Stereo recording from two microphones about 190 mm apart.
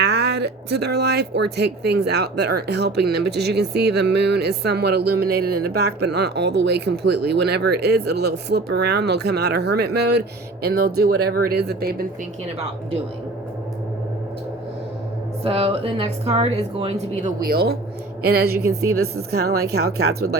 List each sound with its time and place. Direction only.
0.0 s speech: 60° right (ahead or behind)
15.4 s speech: 30° right (ahead or behind)
17.4 s speech: 55° right (ahead or behind)